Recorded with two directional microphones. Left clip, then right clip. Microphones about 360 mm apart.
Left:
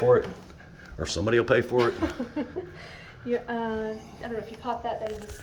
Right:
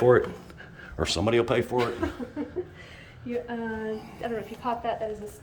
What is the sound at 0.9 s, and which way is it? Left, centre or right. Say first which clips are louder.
Speech: right 1 dB; centre.